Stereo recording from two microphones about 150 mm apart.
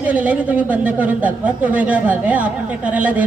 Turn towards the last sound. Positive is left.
turn(degrees=-10)  # may be behind; listen again after turning